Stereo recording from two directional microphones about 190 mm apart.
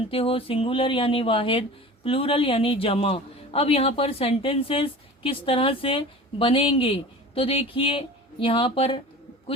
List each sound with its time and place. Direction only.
0.1 s a man's voice: 30° left (ahead or behind)